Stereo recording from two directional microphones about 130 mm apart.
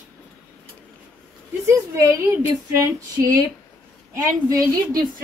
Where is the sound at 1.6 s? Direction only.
20° right (ahead or behind).